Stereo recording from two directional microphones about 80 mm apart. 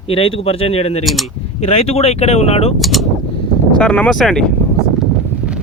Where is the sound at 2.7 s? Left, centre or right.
Centre.